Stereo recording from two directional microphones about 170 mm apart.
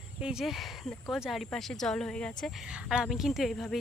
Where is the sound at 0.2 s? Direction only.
5° right (ahead or behind).